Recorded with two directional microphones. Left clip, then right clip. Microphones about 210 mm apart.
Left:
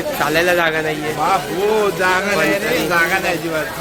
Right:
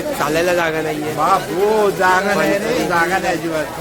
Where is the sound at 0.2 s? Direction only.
Centre (ahead or behind).